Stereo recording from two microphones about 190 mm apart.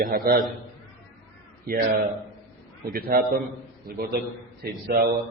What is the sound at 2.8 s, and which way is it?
A man's voice, 50° right (ahead or behind).